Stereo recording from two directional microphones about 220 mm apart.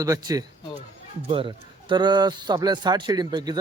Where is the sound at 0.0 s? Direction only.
15° right (ahead or behind).